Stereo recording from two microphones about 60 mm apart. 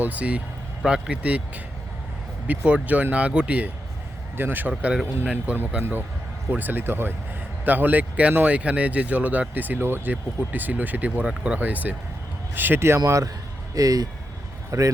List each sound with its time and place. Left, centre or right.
0.0 s speech: right
0.9 s speech: centre
1.1 s speech: right
4.4 s speech: right
5.2 s speech: right
6.5 s speech: right
13.7 s speech: right
14.7 s speech: right